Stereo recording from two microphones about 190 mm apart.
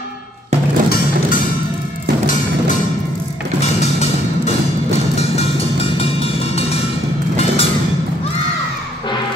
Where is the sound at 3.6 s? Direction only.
35° left (ahead or behind).